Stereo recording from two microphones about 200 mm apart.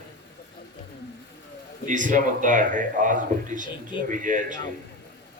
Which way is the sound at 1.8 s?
40° right (ahead or behind).